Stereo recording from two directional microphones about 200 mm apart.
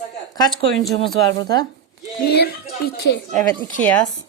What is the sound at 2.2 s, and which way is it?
Speech, 50° left (ahead or behind).